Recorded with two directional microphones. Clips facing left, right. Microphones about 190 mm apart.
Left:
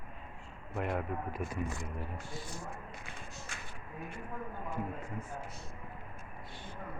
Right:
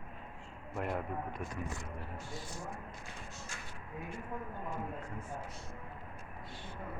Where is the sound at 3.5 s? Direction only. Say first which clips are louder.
Left 1 dB; 65° left (ahead or behind).